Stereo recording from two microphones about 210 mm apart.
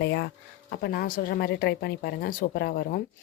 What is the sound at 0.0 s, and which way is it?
Speech, 55° left (ahead or behind).